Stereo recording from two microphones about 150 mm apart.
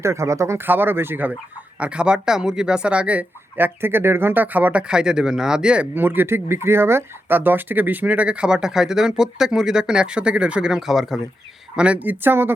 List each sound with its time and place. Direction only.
0.0 s speech: 20° right (ahead or behind)